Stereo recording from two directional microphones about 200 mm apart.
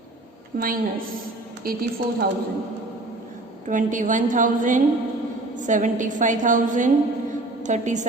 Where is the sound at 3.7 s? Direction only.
40° right (ahead or behind).